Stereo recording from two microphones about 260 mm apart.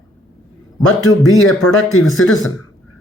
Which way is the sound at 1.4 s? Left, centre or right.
Left.